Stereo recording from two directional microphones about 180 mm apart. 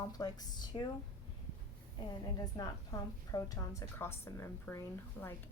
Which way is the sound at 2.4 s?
20° left (ahead or behind).